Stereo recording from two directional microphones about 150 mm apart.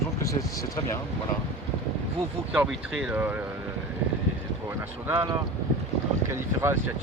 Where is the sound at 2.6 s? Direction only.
5° right (ahead or behind).